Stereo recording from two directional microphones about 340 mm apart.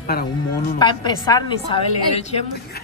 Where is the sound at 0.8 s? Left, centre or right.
Centre.